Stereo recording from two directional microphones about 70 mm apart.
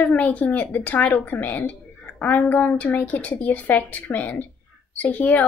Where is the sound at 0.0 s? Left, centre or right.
Left.